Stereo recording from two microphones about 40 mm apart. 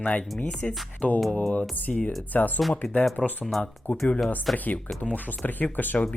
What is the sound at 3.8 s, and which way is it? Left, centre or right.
Speech, left.